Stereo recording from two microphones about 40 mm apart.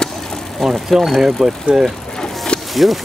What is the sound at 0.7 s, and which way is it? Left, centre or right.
Speech, centre.